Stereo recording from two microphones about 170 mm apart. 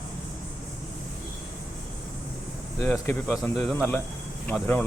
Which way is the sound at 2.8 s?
15° left (ahead or behind).